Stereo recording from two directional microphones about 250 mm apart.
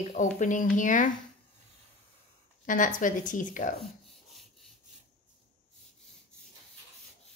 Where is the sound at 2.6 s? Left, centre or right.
Left.